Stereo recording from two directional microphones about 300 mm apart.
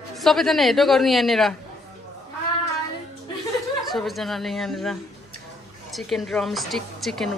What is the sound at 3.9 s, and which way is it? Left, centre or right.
A woman's voice, centre.